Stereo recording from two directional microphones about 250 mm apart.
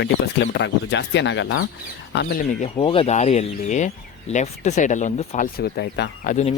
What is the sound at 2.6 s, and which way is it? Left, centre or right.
Speech, left.